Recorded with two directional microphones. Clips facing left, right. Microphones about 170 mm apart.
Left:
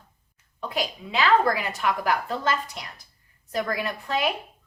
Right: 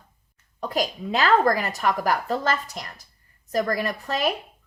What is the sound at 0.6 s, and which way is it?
A woman's voice, 45° right (ahead or behind).